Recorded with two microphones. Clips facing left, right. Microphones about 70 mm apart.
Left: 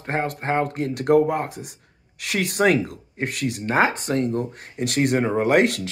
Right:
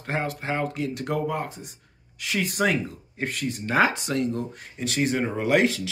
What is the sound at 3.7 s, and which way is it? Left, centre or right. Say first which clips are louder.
Speech: left 2 dB; left.